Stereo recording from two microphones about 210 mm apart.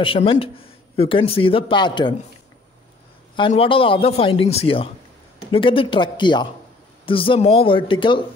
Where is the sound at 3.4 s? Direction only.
25° left (ahead or behind).